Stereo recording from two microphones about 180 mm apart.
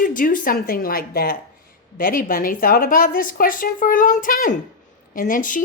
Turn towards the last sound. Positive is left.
turn(degrees=50)  # may be behind; listen again after turning